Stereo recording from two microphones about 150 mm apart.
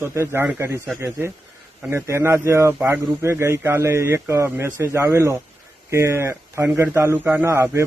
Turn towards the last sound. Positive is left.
turn(degrees=-15)  # may be behind; listen again after turning